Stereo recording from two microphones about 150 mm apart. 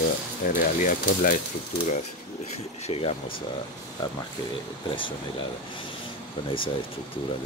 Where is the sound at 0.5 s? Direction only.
60° left (ahead or behind).